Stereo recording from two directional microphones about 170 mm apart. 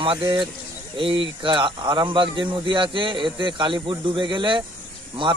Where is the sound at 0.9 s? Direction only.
30° right (ahead or behind).